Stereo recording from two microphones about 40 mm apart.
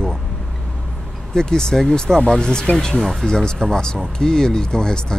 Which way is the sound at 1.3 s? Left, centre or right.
Centre.